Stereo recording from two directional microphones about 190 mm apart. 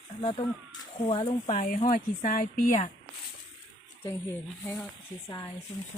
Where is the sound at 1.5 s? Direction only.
45° left (ahead or behind).